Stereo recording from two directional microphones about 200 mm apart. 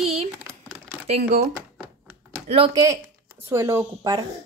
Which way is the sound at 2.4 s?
30° right (ahead or behind).